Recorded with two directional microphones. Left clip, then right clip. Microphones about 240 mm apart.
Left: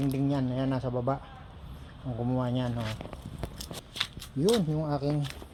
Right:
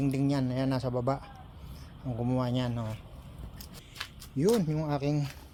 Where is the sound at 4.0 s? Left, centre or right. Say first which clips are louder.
Left 1 dB; centre.